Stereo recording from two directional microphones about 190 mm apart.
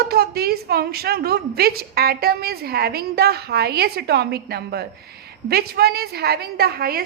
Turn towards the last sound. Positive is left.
turn(degrees=-55)  # may be behind; listen again after turning